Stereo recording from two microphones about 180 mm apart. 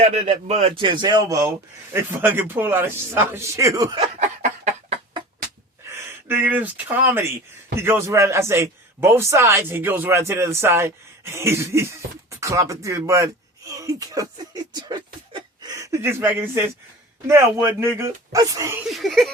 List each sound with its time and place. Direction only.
0.0 s a man's voice: 35° right (ahead or behind); by 4.0 s 20° right (ahead or behind)
4.0 s a sound: 40° right (ahead or behind)
5.9 s a man's voice: 10° right (ahead or behind)
18.9 s speech: centre (ahead or behind)